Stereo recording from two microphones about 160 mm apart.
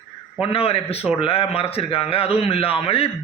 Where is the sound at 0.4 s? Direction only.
35° left (ahead or behind).